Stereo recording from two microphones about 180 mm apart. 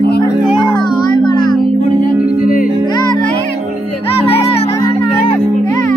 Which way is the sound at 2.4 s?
50° left (ahead or behind).